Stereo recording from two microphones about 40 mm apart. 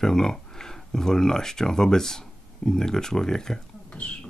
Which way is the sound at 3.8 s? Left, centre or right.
Left.